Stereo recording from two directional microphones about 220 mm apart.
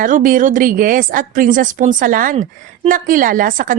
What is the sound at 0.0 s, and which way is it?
A woman's voice, 40° right (ahead or behind).